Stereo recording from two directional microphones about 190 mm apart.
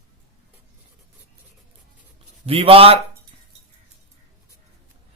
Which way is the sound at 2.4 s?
30° right (ahead or behind).